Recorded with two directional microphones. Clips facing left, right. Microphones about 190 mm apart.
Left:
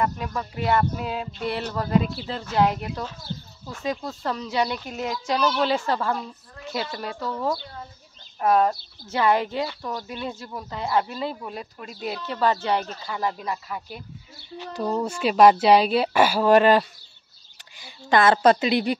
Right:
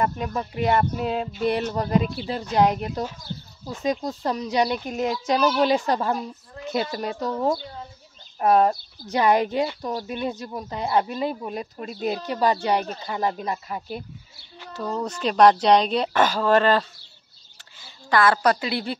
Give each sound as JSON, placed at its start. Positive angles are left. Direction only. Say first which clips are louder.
{"t": 0.0, "sound": "speech", "louder": "right 1 dB", "side_deg": -25}
{"t": 9.0, "sound": "speech", "louder": "right 2 dB", "side_deg": -15}
{"t": 11.9, "sound": "speech", "louder": "right 5 dB", "side_deg": -30}
{"t": 12.3, "sound": "speech", "louder": "even", "side_deg": -15}
{"t": 13.1, "sound": "speech", "louder": "right 2 dB", "side_deg": -30}
{"t": 14.7, "sound": "speech", "louder": "left 2 dB", "side_deg": 10}
{"t": 18.1, "sound": "a woman's voice", "louder": "left 2 dB", "side_deg": 25}